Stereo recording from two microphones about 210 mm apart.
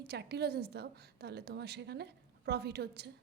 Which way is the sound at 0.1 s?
50° right (ahead or behind).